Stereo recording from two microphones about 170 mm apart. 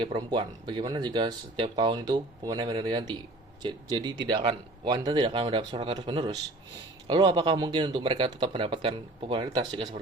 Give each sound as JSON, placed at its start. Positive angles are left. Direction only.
{"t": 0.0, "sound": "speech", "side_deg": -25}